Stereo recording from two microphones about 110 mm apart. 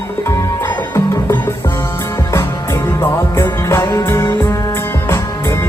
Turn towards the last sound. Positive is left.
turn(degrees=25)  # may be behind; listen again after turning